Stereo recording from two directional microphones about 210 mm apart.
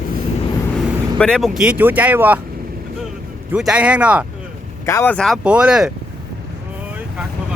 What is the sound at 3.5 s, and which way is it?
Speech, 5° right (ahead or behind).